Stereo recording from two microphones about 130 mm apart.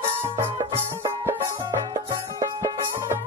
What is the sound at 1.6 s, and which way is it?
Music, 30° right (ahead or behind).